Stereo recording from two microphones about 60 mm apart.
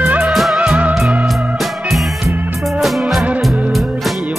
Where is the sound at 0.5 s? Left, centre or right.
Right.